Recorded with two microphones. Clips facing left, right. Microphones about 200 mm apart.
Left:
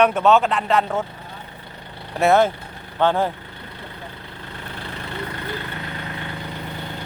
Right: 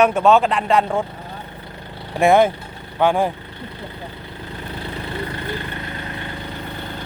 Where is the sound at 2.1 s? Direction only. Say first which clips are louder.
Right 2 dB; 15° right (ahead or behind).